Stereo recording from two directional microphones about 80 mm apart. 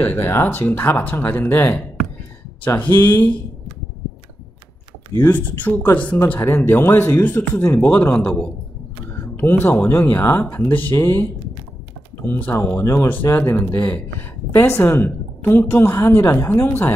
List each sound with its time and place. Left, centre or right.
0.0 s a woman's voice: left
5.2 s a woman's voice: left
9.1 s a woman's voice: left
12.3 s a woman's voice: left
12.8 s speech: left
13.4 s a woman's voice: left